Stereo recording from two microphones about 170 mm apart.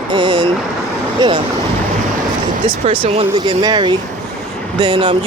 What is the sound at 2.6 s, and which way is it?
Speech, 30° right (ahead or behind).